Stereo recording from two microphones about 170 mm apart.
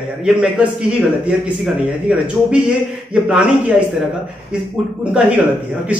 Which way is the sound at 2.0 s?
5° right (ahead or behind).